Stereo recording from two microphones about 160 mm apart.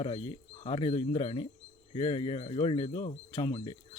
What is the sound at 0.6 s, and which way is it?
Speech, 35° left (ahead or behind).